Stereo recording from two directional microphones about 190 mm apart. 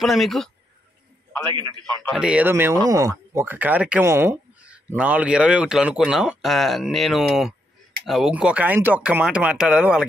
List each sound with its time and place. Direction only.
0.0 s speech: centre (ahead or behind)
1.4 s a man's voice: 25° right (ahead or behind)
2.0 s speech: 5° right (ahead or behind)